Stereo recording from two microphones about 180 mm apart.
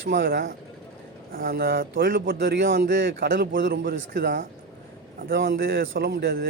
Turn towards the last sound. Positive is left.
turn(degrees=-60)  # may be behind; listen again after turning